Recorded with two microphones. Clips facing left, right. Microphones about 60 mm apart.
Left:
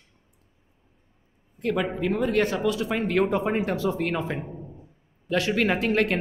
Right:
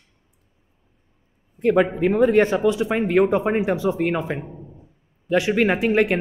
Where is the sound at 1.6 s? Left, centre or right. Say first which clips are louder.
Right 8 dB; right; by 5.3 s centre.